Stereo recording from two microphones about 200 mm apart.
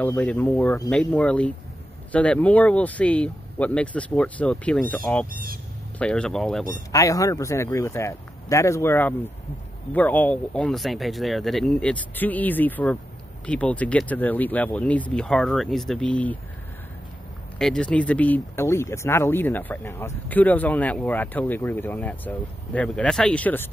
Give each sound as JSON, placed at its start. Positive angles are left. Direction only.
{"t": 0.0, "sound": "speech", "side_deg": 10}
{"t": 5.3, "sound": "speech", "side_deg": -45}
{"t": 5.9, "sound": "speech", "side_deg": 5}
{"t": 6.9, "sound": "speech", "side_deg": 15}
{"t": 17.6, "sound": "speech", "side_deg": 5}